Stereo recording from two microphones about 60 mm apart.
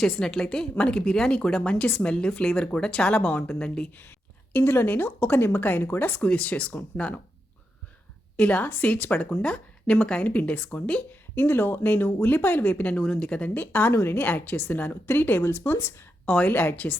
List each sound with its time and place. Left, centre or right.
0.0 s speech: centre
4.5 s a woman's voice: left
6.2 s a woman's voice: left
8.4 s a woman's voice: left
11.1 s a woman's voice: left
16.2 s a woman's voice: left